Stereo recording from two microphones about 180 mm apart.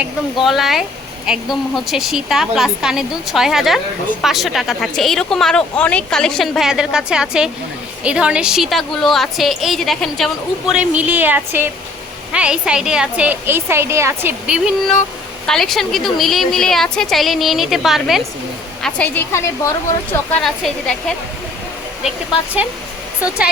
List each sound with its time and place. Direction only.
0.3 s a woman's voice: centre (ahead or behind)
18.8 s a woman's voice: 10° left (ahead or behind)